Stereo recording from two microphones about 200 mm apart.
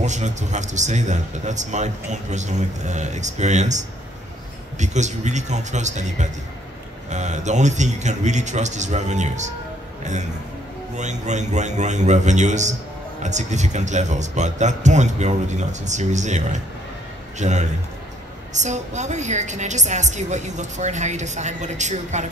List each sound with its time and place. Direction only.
0.0 s a man's voice: 35° right (ahead or behind)
11.0 s a man's voice: 35° right (ahead or behind)